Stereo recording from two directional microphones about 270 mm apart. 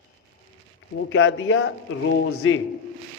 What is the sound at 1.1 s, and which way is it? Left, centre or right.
A man's voice, left.